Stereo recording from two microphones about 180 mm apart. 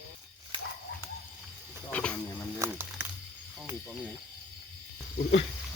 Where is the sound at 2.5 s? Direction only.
10° right (ahead or behind).